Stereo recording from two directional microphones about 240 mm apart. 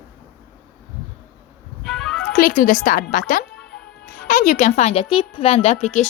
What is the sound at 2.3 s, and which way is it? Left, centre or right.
Speech, left.